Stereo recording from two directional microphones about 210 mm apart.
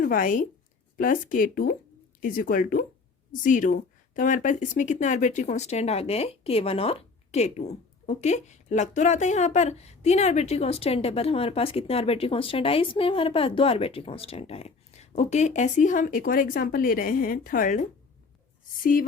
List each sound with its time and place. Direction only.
0.0 s speech: 40° left (ahead or behind)